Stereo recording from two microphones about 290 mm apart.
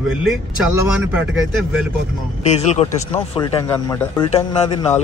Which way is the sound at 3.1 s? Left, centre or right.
Centre.